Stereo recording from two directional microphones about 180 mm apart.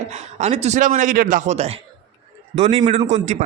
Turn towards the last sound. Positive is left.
turn(degrees=-40)  # may be behind; listen again after turning